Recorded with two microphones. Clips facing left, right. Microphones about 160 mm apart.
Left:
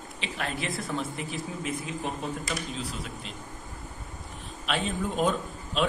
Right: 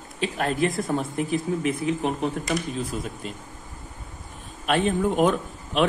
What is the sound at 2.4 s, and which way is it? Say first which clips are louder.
Speech: right 6 dB; 50° right (ahead or behind).